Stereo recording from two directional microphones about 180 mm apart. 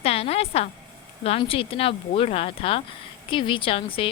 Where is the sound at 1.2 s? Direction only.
30° left (ahead or behind).